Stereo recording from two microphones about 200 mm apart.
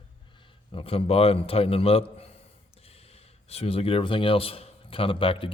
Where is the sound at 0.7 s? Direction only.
25° left (ahead or behind).